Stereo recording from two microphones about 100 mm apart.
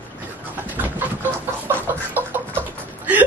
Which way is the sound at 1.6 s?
20° right (ahead or behind).